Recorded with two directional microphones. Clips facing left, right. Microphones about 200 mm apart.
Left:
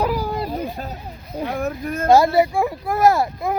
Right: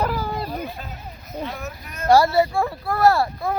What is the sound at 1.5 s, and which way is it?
Speech, 50° left (ahead or behind).